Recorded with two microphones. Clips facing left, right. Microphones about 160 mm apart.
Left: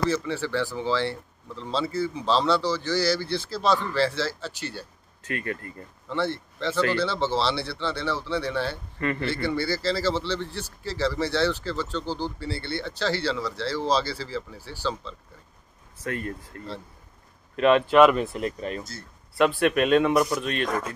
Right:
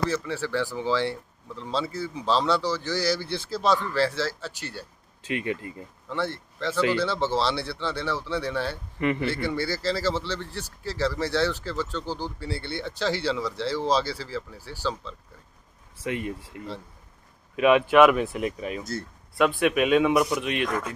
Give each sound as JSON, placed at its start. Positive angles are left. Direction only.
{"t": 0.1, "sound": "speech", "side_deg": -10}